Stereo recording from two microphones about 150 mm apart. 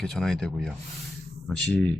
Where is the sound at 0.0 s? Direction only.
5° left (ahead or behind).